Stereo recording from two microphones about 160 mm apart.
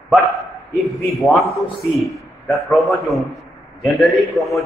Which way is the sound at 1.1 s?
Centre (ahead or behind).